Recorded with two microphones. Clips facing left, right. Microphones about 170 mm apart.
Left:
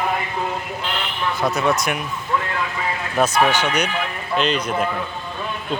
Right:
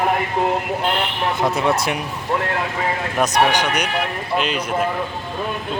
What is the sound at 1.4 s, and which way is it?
Speech, 30° right (ahead or behind).